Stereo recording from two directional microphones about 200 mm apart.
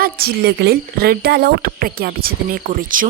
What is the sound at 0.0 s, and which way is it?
A woman's voice, 50° right (ahead or behind).